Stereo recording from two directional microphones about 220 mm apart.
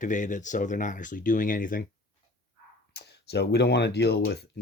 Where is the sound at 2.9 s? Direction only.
50° left (ahead or behind).